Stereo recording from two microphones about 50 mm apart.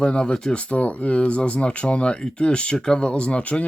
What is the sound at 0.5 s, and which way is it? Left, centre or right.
Speech, left.